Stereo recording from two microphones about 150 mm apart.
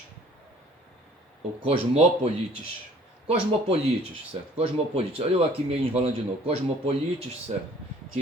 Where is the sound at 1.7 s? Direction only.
40° right (ahead or behind).